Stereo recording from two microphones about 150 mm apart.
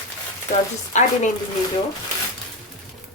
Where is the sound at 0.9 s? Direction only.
50° left (ahead or behind).